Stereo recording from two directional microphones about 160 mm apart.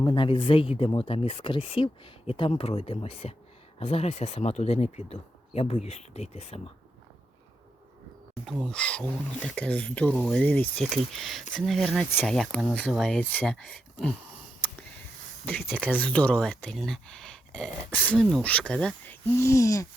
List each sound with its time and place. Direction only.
0.0 s speech: 30° left (ahead or behind)
8.7 s speech: 5° left (ahead or behind)
15.4 s speech: 5° left (ahead or behind)
18.1 s speech: 5° left (ahead or behind)
19.4 s a sound: 20° left (ahead or behind)